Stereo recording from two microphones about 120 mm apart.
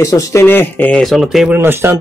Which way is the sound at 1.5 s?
20° right (ahead or behind).